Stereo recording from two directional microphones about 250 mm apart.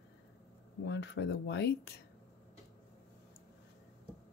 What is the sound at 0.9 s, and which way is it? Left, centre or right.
Speech, left.